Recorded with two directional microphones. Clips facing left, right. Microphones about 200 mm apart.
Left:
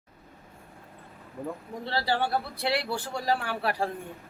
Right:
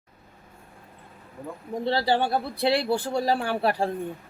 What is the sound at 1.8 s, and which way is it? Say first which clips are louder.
Speech: right 5 dB; 20° right (ahead or behind).